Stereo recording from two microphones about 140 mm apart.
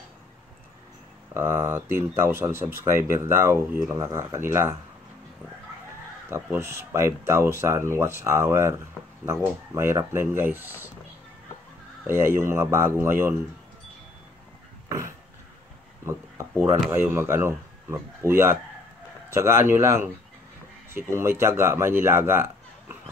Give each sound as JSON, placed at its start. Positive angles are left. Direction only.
{"t": 1.3, "sound": "speech", "side_deg": -20}
{"t": 6.3, "sound": "speech", "side_deg": -20}
{"t": 12.1, "sound": "speech", "side_deg": -15}
{"t": 16.9, "sound": "speech", "side_deg": -15}